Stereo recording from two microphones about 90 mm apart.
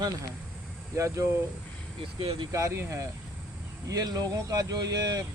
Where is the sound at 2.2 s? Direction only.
90° right.